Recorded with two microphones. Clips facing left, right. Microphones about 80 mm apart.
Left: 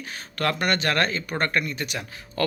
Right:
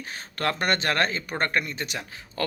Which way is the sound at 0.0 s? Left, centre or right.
Right.